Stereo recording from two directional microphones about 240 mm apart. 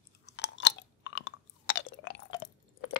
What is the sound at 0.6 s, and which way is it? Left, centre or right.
Chewing, left.